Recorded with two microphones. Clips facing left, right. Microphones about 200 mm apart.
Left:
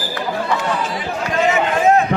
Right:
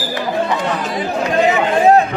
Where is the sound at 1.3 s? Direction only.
35° right (ahead or behind).